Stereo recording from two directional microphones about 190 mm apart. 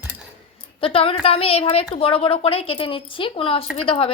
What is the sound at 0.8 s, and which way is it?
A woman's voice, 30° left (ahead or behind).